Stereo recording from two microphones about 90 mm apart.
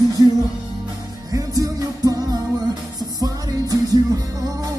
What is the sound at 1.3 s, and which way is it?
Music, 40° right (ahead or behind).